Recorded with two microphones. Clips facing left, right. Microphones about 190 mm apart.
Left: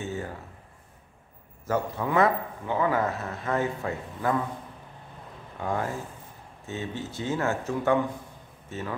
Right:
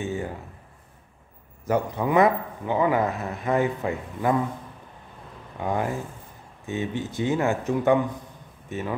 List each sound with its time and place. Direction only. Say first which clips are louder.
0.0 s a sound: right 4 dB; 15° right (ahead or behind)
1.7 s a man's voice: right 4 dB; 15° right (ahead or behind)
5.6 s a man's voice: right 3 dB; 15° right (ahead or behind)